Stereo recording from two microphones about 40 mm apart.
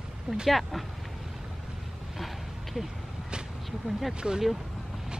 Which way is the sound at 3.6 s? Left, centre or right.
Centre.